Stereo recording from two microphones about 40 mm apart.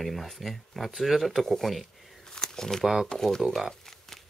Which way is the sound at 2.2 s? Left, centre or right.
Centre.